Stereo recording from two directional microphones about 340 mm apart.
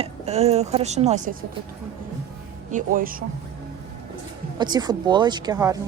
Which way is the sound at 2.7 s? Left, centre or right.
Right.